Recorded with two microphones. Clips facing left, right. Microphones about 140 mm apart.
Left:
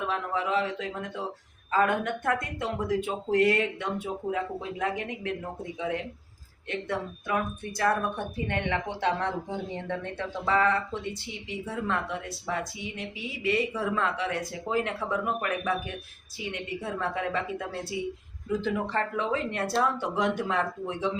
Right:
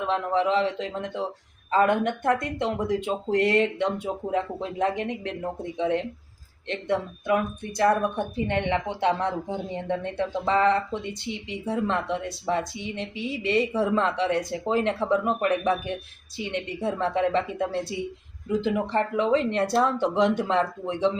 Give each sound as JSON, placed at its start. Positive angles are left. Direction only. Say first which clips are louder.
{"t": 0.1, "sound": "speech", "louder": "right 7 dB", "side_deg": -25}
{"t": 8.4, "sound": "speech", "louder": "right 3 dB", "side_deg": -20}